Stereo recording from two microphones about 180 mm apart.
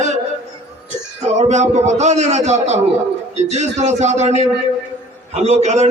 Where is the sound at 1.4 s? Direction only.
40° right (ahead or behind).